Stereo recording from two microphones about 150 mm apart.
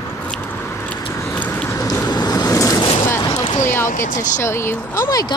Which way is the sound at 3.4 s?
50° left (ahead or behind).